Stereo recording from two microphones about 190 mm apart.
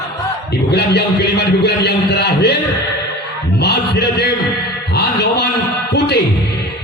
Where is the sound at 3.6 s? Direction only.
60° left (ahead or behind).